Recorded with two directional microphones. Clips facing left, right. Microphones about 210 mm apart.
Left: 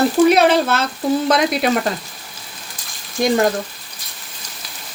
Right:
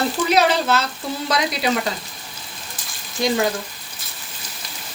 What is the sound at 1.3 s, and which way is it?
Stir, 55° left (ahead or behind).